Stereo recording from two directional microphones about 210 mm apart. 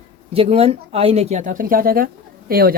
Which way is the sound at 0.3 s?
30° right (ahead or behind).